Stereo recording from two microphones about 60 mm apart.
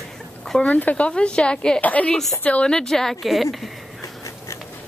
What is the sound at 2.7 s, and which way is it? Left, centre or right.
Speech, centre.